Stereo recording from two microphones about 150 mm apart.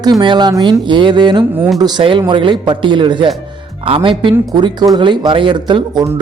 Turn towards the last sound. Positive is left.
turn(degrees=-30)  # may be behind; listen again after turning